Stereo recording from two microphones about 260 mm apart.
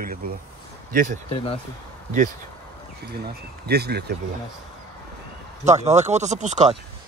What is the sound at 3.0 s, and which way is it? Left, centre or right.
Speech, right.